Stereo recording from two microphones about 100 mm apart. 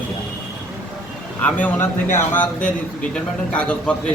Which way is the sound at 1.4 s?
15° left (ahead or behind).